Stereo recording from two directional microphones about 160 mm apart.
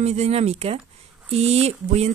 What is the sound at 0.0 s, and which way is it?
Speech, 45° right (ahead or behind).